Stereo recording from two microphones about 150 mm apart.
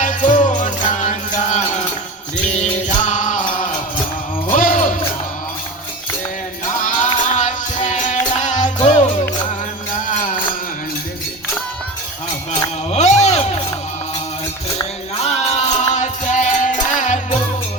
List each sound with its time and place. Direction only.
0.0 s music: 60° left (ahead or behind)
3.0 s music: 55° left (ahead or behind)
6.8 s music: 55° left (ahead or behind)
12.9 s a sound: 50° left (ahead or behind)
15.2 s music: 45° left (ahead or behind)